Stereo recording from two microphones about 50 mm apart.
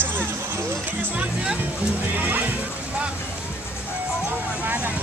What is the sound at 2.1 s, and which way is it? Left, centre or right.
Music, right.